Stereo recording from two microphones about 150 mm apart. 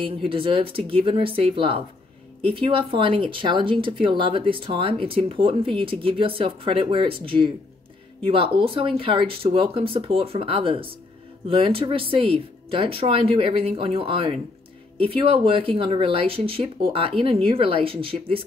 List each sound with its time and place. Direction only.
0.0 s speech: 35° right (ahead or behind)